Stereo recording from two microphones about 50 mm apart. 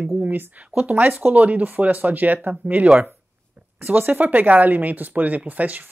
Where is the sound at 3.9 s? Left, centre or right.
Right.